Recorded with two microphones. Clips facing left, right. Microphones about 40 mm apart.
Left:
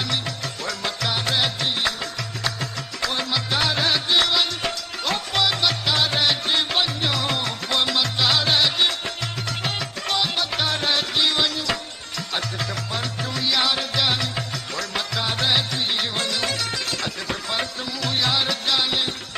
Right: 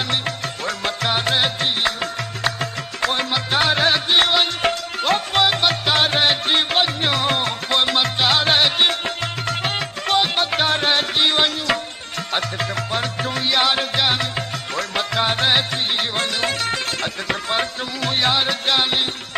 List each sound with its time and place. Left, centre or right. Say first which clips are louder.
0.1 s music: right 4 dB; right